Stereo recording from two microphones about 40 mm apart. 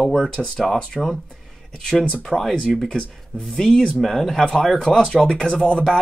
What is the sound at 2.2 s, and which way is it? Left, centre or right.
Speech, centre.